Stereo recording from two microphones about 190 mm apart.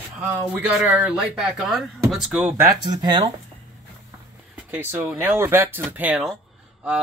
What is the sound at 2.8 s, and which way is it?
Speech, 25° right (ahead or behind).